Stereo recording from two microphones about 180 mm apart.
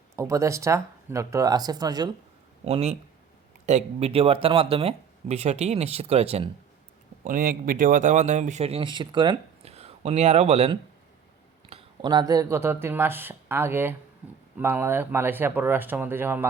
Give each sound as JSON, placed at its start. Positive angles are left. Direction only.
{"t": 0.2, "sound": "speech", "side_deg": -15}
{"t": 2.6, "sound": "speech", "side_deg": -35}
{"t": 7.3, "sound": "speech", "side_deg": -50}